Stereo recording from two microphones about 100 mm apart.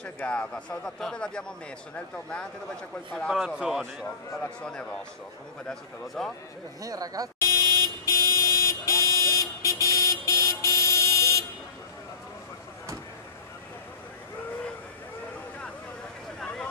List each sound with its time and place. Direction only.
0.0 s speech: 10° left (ahead or behind)
3.3 s speech: 5° right (ahead or behind)
4.4 s a man's voice: 10° left (ahead or behind)
6.8 s speech: 40° right (ahead or behind)
7.3 s vehicle: 40° left (ahead or behind)